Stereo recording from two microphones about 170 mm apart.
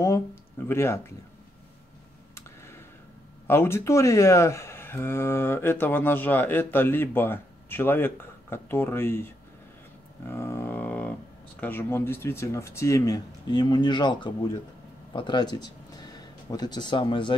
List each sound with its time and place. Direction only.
0.7 s speech: 15° left (ahead or behind)
2.3 s tick: 15° left (ahead or behind)
3.4 s speech: 15° left (ahead or behind)
10.2 s a sound: 15° left (ahead or behind)
11.6 s speech: 10° left (ahead or behind); by 17.4 s 30° left (ahead or behind)